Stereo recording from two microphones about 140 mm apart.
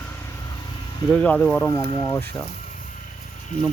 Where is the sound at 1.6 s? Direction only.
30° left (ahead or behind).